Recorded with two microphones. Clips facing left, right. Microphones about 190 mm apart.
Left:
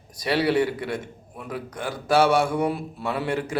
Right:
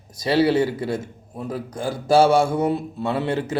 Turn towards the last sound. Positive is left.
turn(degrees=-25)  # may be behind; listen again after turning